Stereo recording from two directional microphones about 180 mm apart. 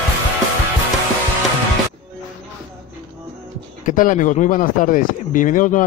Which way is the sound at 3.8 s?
45° left (ahead or behind).